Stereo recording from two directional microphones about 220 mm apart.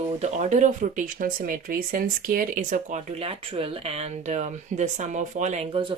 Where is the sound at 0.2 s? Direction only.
35° right (ahead or behind).